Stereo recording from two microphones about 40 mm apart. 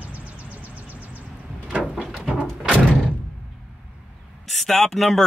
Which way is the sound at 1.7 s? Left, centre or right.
Right.